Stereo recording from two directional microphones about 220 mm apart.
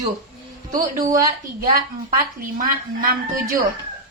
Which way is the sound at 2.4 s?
40° right (ahead or behind).